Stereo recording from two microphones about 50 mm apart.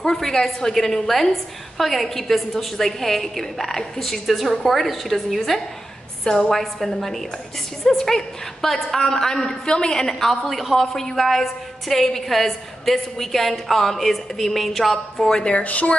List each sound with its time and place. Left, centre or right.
0.0 s a woman's voice: centre
6.2 s a woman's voice: centre
15.6 s speech: left